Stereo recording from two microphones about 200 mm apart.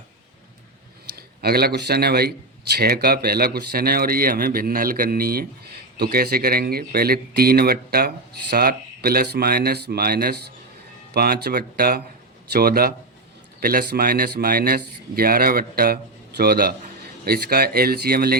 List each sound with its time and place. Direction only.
1.0 s speech: 50° right (ahead or behind)